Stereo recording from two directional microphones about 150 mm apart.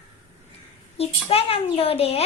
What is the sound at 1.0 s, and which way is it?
A child's voice, 40° left (ahead or behind).